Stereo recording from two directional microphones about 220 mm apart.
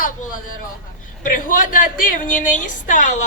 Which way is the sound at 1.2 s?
35° left (ahead or behind).